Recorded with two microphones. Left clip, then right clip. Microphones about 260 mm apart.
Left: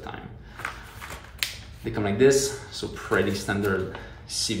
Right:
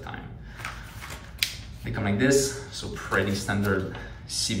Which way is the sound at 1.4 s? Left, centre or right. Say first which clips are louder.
Right 2 dB; centre.